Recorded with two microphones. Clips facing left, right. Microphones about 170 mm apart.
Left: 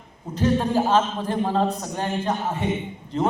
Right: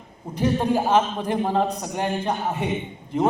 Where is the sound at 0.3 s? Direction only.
15° right (ahead or behind).